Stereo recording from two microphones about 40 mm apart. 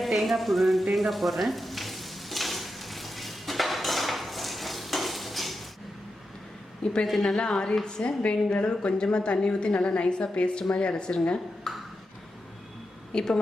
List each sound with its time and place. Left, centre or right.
0.0 s frying: centre
7.0 s a woman's voice: centre
7.3 s a woman's voice: centre
11.7 s ping: centre
13.1 s a woman's voice: left